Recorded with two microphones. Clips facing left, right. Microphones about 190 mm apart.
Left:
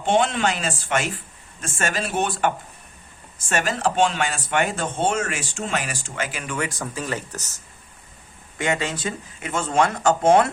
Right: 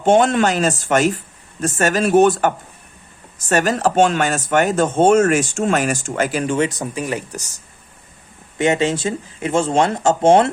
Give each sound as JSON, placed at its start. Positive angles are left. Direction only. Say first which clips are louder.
{"t": 0.0, "sound": "speech", "louder": "right 6 dB", "side_deg": -45}
{"t": 3.5, "sound": "speech", "louder": "right 6 dB", "side_deg": -40}